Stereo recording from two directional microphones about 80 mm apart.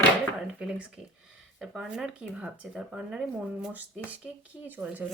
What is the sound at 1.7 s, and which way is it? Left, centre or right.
Speech, centre.